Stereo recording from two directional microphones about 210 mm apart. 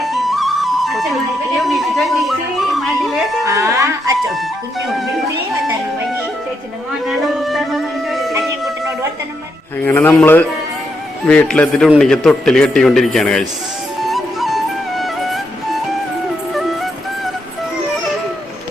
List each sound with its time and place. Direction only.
0.0 s flute: centre (ahead or behind)
1.5 s music: centre (ahead or behind)
3.4 s music: 15° right (ahead or behind)
7.0 s music: centre (ahead or behind)
9.8 s a man's voice: 10° left (ahead or behind)
14.1 s music: centre (ahead or behind)
16.6 s music: centre (ahead or behind)